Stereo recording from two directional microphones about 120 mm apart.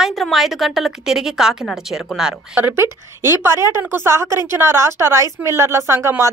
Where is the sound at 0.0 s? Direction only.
Centre (ahead or behind).